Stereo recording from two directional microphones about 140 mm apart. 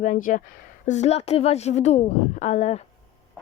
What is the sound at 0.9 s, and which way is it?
A woman's voice, 55° left (ahead or behind).